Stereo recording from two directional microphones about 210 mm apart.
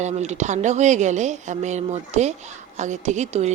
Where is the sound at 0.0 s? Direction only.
30° right (ahead or behind).